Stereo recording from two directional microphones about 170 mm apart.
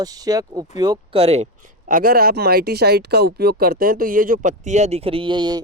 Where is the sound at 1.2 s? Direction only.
40° right (ahead or behind).